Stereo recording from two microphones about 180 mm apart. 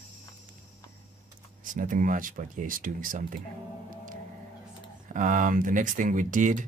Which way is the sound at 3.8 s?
50° right (ahead or behind).